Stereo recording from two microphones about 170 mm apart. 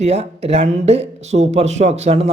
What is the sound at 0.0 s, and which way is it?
Speech, 35° right (ahead or behind).